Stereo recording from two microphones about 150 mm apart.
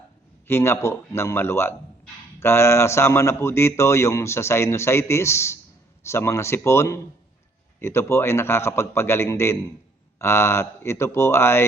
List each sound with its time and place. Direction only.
0.4 s speech: 15° left (ahead or behind)